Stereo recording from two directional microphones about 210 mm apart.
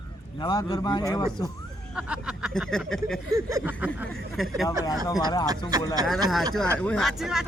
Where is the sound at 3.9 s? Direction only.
Centre (ahead or behind).